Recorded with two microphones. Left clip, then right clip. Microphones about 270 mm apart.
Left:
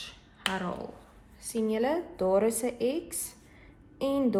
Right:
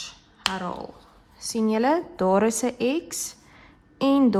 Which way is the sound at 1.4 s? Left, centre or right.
Right.